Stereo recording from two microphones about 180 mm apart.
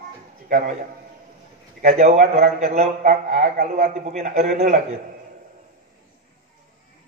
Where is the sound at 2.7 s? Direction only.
40° right (ahead or behind).